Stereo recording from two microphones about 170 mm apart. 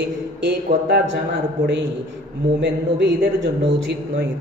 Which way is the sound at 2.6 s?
90° right.